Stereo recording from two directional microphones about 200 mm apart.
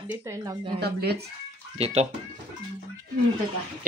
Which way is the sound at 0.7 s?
55° right (ahead or behind).